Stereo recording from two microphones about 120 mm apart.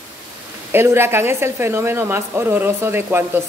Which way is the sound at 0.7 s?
20° right (ahead or behind).